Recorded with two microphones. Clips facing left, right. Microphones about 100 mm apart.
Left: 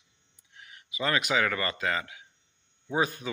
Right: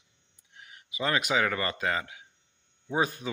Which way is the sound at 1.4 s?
20° right (ahead or behind).